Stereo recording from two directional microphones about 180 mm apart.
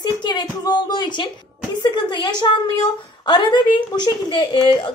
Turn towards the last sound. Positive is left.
turn(degrees=25)  # may be behind; listen again after turning